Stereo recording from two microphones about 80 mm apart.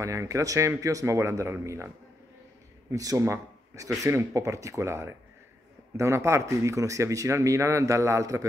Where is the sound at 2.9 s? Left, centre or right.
Right.